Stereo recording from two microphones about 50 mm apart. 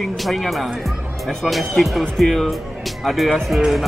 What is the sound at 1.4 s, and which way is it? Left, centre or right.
Speech, centre.